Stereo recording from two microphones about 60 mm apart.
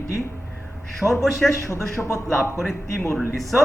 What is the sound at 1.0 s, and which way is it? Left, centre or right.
Speech, centre.